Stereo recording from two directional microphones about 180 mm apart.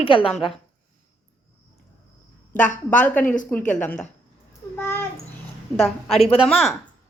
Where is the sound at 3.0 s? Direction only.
10° left (ahead or behind).